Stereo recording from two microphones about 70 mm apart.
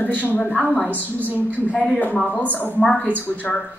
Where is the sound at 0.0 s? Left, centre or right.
Left.